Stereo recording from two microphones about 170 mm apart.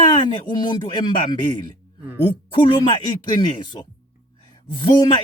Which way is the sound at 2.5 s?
30° left (ahead or behind).